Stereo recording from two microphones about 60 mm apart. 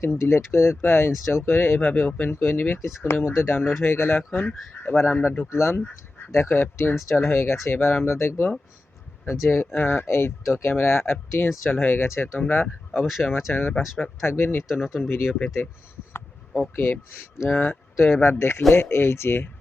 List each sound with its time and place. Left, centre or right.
0.0 s speech: left
1.9 s speech: left
2.3 s speech: left
5.5 s speech: left
9.7 s speech: left
12.9 s speech: centre
13.5 s speech: left
14.7 s speech: centre
16.7 s speech: left